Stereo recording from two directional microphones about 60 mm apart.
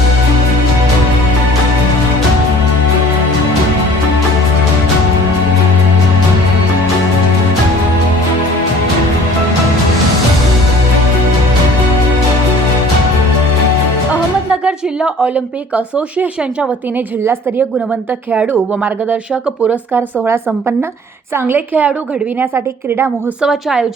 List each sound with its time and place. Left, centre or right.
14.5 s a sound: centre
15.7 s speech: right
18.8 s speech: centre
21.3 s a woman's voice: right
23.4 s a woman's voice: centre